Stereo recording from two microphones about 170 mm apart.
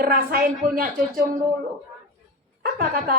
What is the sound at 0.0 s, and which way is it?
A woman's voice, 60° right (ahead or behind).